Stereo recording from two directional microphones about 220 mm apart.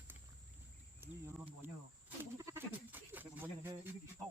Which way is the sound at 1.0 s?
10° right (ahead or behind).